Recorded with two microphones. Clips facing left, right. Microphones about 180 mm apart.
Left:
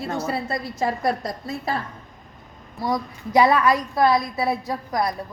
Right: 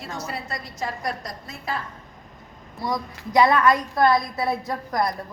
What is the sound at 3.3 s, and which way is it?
A woman's voice, 10° left (ahead or behind).